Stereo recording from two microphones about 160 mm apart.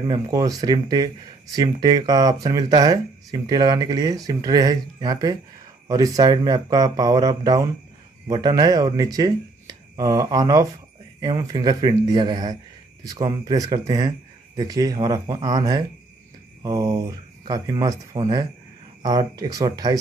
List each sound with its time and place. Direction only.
0.0 s speech: 25° right (ahead or behind)